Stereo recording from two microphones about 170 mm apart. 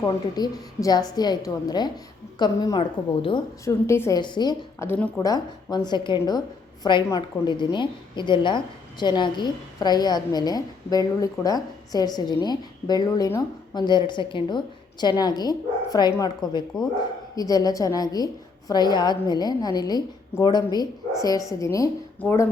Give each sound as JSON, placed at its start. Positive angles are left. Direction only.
{"t": 0.0, "sound": "a woman's voice", "side_deg": 20}
{"t": 3.6, "sound": "a woman's voice", "side_deg": 15}
{"t": 4.2, "sound": "a woman's voice", "side_deg": 25}